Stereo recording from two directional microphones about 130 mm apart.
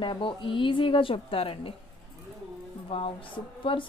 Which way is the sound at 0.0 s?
40° left (ahead or behind).